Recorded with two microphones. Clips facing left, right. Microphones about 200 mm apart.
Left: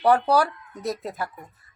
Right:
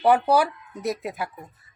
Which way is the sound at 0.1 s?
5° right (ahead or behind).